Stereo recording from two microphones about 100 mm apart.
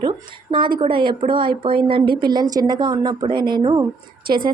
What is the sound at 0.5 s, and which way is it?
A woman's voice, 55° right (ahead or behind).